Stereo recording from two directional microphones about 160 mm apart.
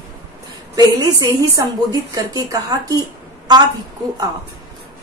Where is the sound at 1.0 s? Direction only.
20° right (ahead or behind).